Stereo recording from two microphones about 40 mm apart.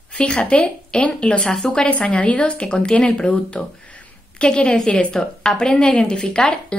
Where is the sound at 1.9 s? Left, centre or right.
Left.